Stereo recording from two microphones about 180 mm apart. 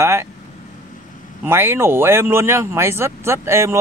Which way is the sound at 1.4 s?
15° right (ahead or behind).